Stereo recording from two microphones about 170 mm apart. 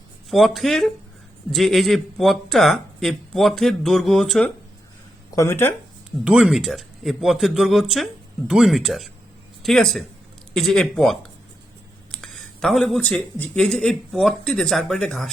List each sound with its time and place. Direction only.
0.3 s speech: centre (ahead or behind)
5.3 s speech: 15° left (ahead or behind)
6.1 s speech: 5° right (ahead or behind)